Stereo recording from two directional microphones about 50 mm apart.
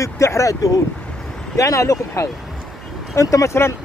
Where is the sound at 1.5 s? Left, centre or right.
Left.